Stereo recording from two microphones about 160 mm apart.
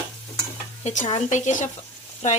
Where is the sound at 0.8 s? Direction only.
50° left (ahead or behind).